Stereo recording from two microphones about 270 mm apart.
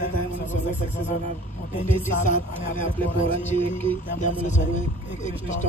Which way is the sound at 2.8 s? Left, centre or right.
Centre.